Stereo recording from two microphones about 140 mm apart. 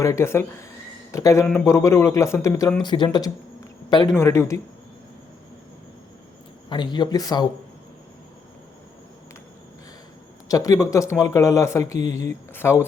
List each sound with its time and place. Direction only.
0.0 s speech: 20° left (ahead or behind)
2.8 s a man's voice: 30° left (ahead or behind)
4.1 s speech: 20° left (ahead or behind)
6.7 s speech: 30° left (ahead or behind)
10.5 s speech: 25° left (ahead or behind)